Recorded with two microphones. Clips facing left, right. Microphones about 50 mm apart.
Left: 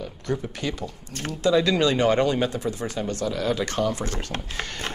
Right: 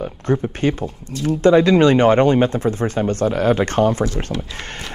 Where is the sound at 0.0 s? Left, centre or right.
Right.